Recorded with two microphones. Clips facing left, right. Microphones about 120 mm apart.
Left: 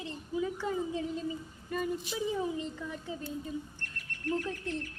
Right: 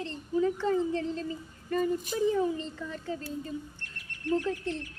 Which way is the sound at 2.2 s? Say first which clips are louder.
Right 6 dB; 15° left (ahead or behind).